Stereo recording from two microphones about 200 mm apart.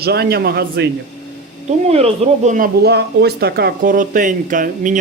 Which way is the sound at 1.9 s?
30° right (ahead or behind).